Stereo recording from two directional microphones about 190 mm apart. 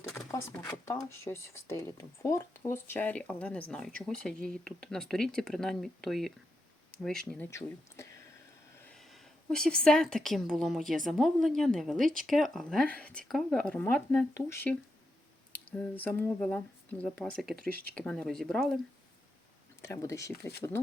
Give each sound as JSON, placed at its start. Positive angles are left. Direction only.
{"t": 0.3, "sound": "speech", "side_deg": 15}
{"t": 9.5, "sound": "speech", "side_deg": 5}
{"t": 19.8, "sound": "speech", "side_deg": 15}